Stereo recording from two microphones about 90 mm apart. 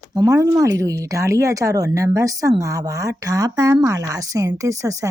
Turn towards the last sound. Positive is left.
turn(degrees=-35)  # may be behind; listen again after turning